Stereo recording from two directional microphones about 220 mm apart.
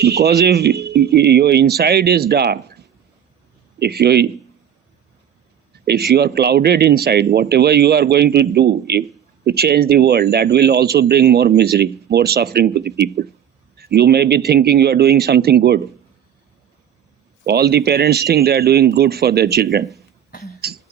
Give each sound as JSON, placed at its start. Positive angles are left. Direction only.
{"t": 0.0, "sound": "a man's voice", "side_deg": -45}
{"t": 5.7, "sound": "a man's voice", "side_deg": -45}
{"t": 17.4, "sound": "a man's voice", "side_deg": -45}
{"t": 20.6, "sound": "beatboxing", "side_deg": -45}